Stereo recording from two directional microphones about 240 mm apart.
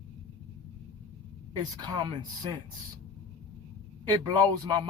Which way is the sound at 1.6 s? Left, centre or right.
Centre.